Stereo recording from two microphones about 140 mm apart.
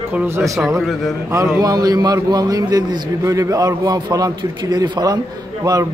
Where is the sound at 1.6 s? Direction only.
30° right (ahead or behind).